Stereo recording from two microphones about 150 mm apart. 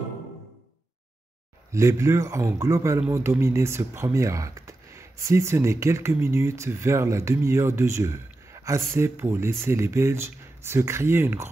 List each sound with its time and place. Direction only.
1.7 s a man's voice: 20° right (ahead or behind)